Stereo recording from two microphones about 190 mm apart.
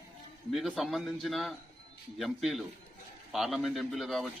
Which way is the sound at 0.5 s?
Centre (ahead or behind).